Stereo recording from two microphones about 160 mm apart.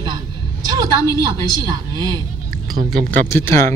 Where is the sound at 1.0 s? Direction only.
20° left (ahead or behind).